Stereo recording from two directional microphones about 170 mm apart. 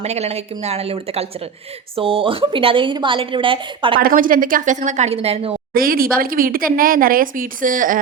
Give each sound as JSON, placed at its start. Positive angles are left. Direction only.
{"t": 0.0, "sound": "a woman's voice", "side_deg": -40}
{"t": 4.0, "sound": "a woman's voice", "side_deg": -55}
{"t": 5.7, "sound": "speech", "side_deg": -60}